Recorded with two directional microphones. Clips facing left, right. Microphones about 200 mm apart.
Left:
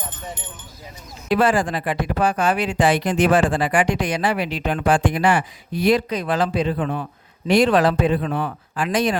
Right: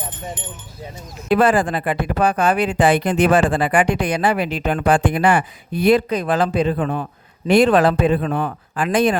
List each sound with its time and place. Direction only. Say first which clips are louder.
1.3 s speech: right 3 dB; 55° right (ahead or behind)